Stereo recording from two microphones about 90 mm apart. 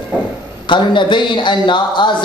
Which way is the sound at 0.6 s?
60° left (ahead or behind).